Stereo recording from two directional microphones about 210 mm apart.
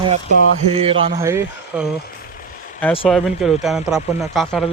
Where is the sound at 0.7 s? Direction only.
25° right (ahead or behind).